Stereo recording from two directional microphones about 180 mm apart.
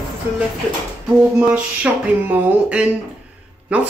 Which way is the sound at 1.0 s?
5° right (ahead or behind).